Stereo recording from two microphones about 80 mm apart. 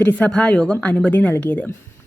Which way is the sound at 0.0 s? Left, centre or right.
Left.